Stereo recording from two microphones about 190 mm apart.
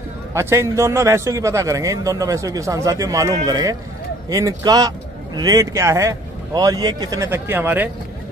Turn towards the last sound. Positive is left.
turn(degrees=-10)  # may be behind; listen again after turning